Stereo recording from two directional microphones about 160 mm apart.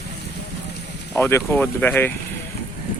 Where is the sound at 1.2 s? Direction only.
15° left (ahead or behind).